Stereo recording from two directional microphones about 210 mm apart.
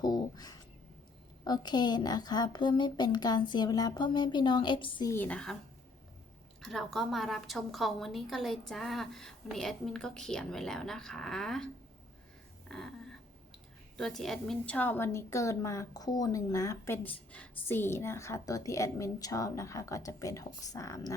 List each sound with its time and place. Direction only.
0.0 s speech: 20° left (ahead or behind)
5.1 s a woman's voice: 5° left (ahead or behind)
6.6 s a woman's voice: centre (ahead or behind)
12.7 s a woman's voice: centre (ahead or behind)
13.9 s a woman's voice: centre (ahead or behind)